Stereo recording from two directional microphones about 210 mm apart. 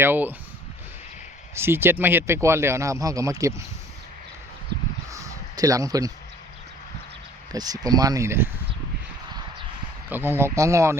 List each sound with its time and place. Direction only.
0.0 s speech: 10° right (ahead or behind)
1.5 s speech: 10° right (ahead or behind)
5.1 s a sound: 15° right (ahead or behind)
7.5 s speech: 15° right (ahead or behind)
10.1 s speech: 10° right (ahead or behind)